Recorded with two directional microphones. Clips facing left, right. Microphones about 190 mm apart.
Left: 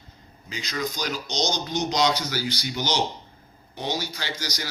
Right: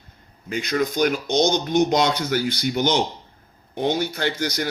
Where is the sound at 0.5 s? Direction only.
55° right (ahead or behind).